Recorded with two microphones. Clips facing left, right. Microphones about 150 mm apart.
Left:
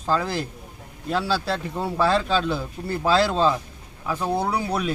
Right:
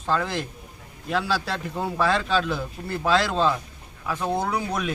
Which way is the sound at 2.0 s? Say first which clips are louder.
Left 2 dB; 30° left (ahead or behind).